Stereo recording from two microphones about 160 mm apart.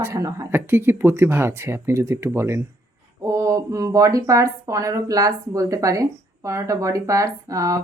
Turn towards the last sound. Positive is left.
turn(degrees=-20)  # may be behind; listen again after turning